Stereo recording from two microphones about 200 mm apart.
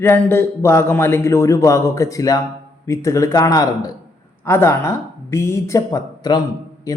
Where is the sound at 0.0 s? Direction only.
10° left (ahead or behind).